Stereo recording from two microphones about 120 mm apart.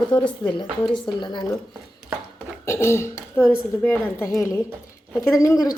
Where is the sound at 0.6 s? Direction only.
40° left (ahead or behind).